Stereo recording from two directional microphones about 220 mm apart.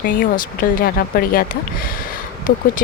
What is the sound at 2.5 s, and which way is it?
Speech, 40° left (ahead or behind).